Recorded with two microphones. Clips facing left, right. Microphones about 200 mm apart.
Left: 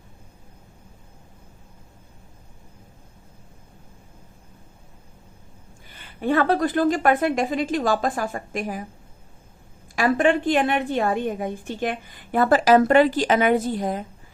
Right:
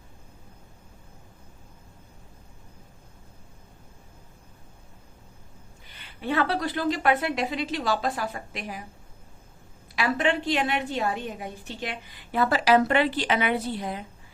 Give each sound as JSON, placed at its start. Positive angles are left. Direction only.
{"t": 5.9, "sound": "a woman's voice", "side_deg": 50}
{"t": 9.9, "sound": "a woman's voice", "side_deg": 50}